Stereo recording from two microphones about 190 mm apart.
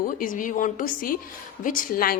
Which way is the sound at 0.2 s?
45° left (ahead or behind).